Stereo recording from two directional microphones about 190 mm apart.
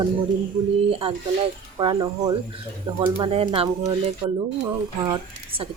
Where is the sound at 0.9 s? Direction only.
30° right (ahead or behind).